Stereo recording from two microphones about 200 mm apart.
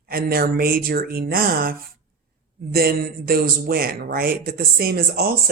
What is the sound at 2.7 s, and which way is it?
Speech, 50° right (ahead or behind).